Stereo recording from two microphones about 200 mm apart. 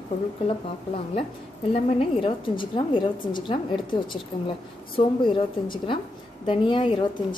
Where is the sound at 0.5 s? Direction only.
30° left (ahead or behind).